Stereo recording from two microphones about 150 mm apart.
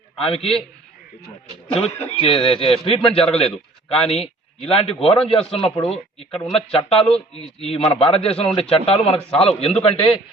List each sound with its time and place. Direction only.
0.2 s speech: 40° left (ahead or behind)
1.7 s speech: 45° left (ahead or behind)